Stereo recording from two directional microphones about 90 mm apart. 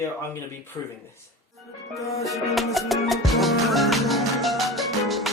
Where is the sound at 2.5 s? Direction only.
Centre (ahead or behind).